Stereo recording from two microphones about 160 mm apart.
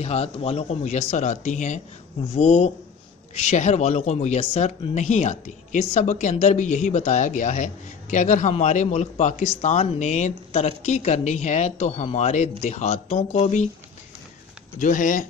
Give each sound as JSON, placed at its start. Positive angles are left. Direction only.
{"t": 0.0, "sound": "a woman's voice", "side_deg": 40}
{"t": 14.8, "sound": "speech", "side_deg": 55}